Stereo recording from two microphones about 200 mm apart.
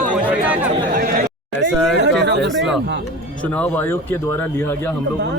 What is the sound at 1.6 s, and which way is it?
Speech, 60° right (ahead or behind).